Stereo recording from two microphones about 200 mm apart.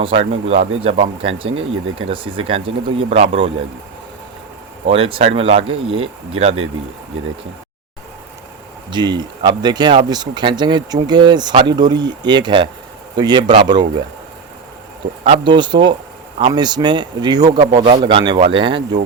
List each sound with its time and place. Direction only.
0.0 s speech: 30° right (ahead or behind)
1.5 s speech: 80° right
2.0 s speech: 25° right (ahead or behind)
4.9 s speech: 30° right (ahead or behind)
8.9 s speech: 20° right (ahead or behind)
15.2 s speech: 25° right (ahead or behind)